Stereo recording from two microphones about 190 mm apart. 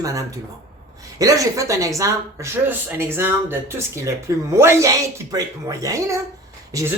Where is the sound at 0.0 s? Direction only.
15° right (ahead or behind).